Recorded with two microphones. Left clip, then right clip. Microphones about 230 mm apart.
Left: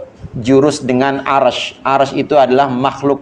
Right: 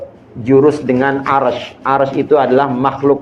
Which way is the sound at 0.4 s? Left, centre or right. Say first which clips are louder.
Right 1 dB; left.